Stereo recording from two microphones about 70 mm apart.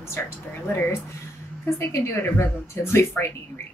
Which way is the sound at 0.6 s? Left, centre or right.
Left.